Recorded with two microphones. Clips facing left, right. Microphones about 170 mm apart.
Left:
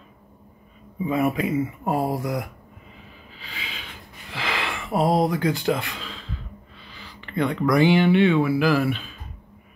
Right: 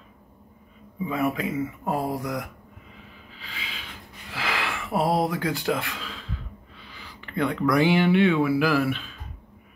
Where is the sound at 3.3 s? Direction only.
Centre (ahead or behind).